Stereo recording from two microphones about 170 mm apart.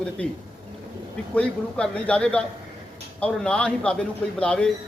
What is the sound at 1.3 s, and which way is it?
A man's voice, 5° left (ahead or behind).